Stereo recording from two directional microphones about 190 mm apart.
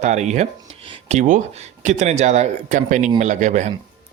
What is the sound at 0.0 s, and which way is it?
Speech, 40° right (ahead or behind).